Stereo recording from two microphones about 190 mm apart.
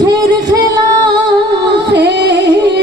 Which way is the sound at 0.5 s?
20° right (ahead or behind).